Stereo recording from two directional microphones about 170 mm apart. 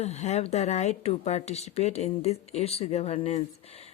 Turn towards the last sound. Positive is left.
turn(degrees=35)  # may be behind; listen again after turning